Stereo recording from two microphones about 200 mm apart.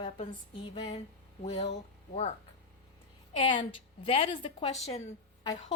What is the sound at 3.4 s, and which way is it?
A woman's voice, 25° left (ahead or behind).